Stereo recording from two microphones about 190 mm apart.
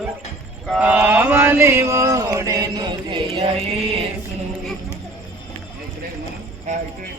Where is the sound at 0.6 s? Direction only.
5° right (ahead or behind); by 4.1 s 30° right (ahead or behind).